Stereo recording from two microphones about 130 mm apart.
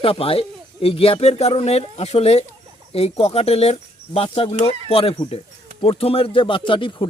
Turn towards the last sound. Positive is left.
turn(degrees=40)  # may be behind; listen again after turning